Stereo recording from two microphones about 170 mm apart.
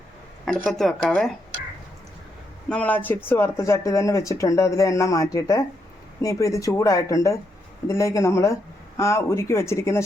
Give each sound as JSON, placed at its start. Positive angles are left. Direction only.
{"t": 0.4, "sound": "speech", "side_deg": 5}
{"t": 2.6, "sound": "speech", "side_deg": 10}